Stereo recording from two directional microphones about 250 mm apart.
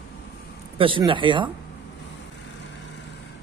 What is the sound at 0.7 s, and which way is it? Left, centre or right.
Speech, centre.